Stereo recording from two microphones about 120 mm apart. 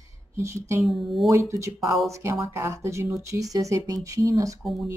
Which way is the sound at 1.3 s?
25° right (ahead or behind).